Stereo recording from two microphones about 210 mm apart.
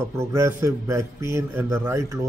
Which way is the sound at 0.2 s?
15° right (ahead or behind).